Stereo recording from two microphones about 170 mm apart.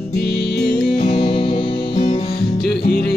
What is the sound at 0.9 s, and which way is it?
Music, 35° left (ahead or behind).